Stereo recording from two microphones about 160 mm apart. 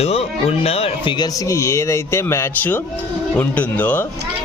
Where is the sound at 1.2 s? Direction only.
15° left (ahead or behind).